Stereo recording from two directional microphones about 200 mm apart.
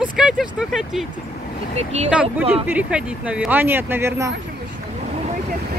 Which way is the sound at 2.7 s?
5° right (ahead or behind).